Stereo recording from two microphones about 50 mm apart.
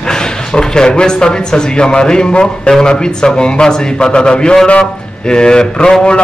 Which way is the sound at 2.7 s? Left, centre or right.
Centre.